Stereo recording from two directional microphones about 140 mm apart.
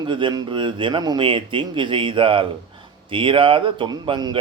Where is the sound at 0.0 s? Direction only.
35° right (ahead or behind).